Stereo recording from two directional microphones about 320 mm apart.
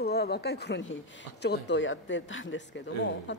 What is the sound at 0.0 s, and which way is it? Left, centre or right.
Speech, left.